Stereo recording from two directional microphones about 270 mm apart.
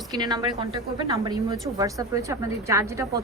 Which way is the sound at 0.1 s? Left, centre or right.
Centre.